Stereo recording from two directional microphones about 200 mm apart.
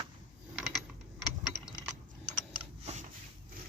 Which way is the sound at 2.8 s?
35° right (ahead or behind).